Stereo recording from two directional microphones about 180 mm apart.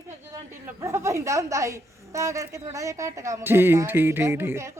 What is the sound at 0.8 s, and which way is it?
Speech, 15° right (ahead or behind).